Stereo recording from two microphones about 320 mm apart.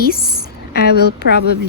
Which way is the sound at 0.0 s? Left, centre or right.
Left.